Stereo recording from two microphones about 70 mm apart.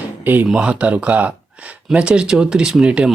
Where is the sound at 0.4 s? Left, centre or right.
Centre.